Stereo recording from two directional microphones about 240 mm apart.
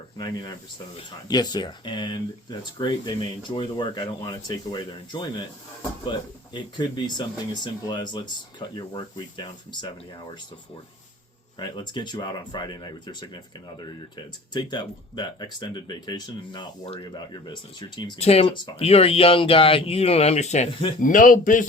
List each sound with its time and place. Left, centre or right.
0.2 s speech: centre
11.6 s a man's voice: centre; by 21.7 s left